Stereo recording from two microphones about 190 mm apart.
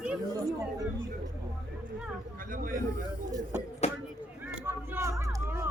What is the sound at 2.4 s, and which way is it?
Speech, 45° right (ahead or behind).